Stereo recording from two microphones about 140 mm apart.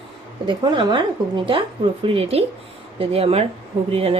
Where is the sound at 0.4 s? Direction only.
35° right (ahead or behind).